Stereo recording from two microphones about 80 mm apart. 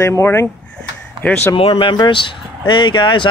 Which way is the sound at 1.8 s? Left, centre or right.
Left.